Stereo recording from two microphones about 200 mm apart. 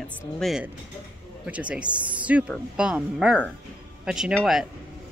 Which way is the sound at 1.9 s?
25° right (ahead or behind).